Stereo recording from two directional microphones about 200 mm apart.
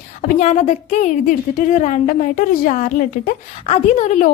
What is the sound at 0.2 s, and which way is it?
A woman's voice, 40° left (ahead or behind).